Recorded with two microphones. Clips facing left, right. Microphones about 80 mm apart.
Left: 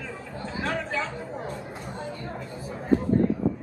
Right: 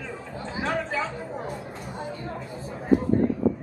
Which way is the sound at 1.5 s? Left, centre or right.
Centre.